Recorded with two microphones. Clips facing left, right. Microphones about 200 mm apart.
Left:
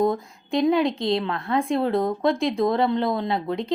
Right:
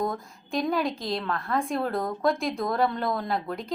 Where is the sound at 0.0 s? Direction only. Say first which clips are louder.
Left 7 dB; 20° left (ahead or behind).